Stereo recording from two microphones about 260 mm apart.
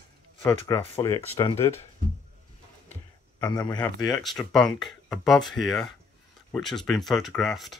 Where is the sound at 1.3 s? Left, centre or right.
Left.